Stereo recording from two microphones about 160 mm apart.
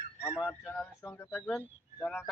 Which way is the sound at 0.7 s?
10° left (ahead or behind).